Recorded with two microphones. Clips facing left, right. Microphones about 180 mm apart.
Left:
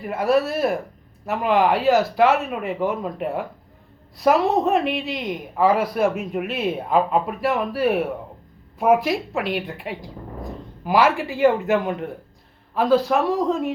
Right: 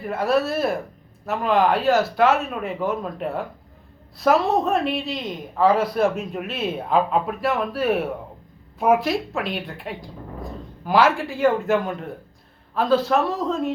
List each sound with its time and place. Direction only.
0.0 s speech: 15° left (ahead or behind)